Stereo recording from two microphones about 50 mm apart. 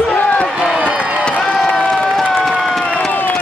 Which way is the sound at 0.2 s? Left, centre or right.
Left.